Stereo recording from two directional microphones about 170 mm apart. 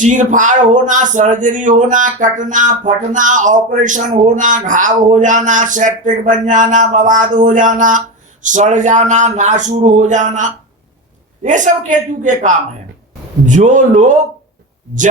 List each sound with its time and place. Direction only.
0.0 s speech: 50° right (ahead or behind)